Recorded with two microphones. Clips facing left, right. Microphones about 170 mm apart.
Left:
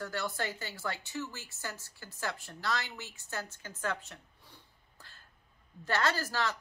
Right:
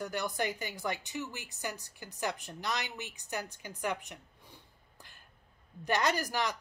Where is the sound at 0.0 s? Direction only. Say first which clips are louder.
Right 2 dB; 15° right (ahead or behind).